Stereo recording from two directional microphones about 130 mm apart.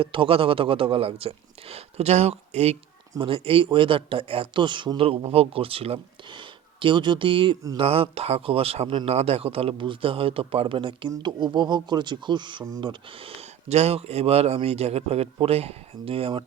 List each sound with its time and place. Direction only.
0.0 s speech: 45° right (ahead or behind)